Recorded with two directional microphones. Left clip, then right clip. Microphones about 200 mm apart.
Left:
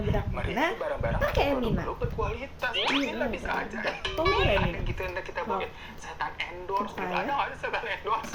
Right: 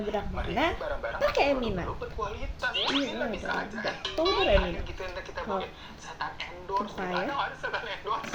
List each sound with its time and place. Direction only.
0.1 s speech: 15° left (ahead or behind)
1.2 s speech: 5° left (ahead or behind)
2.2 s speech: 20° left (ahead or behind)
7.1 s speech: 20° left (ahead or behind)